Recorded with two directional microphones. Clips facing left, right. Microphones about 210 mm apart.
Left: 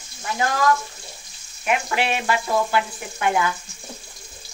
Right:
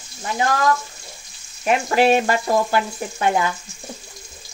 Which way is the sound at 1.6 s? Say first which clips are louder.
Right 6 dB; 35° right (ahead or behind).